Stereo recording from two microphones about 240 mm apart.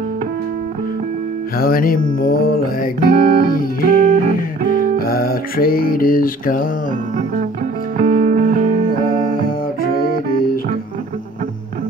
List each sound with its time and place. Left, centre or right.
1.6 s music: left
3.0 s speech: right
3.4 s music: left
8.0 s music: right
9.4 s music: left